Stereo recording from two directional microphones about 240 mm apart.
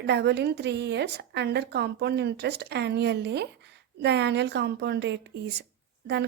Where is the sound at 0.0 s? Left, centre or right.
Right.